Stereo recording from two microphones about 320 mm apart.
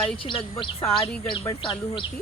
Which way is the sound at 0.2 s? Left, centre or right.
Centre.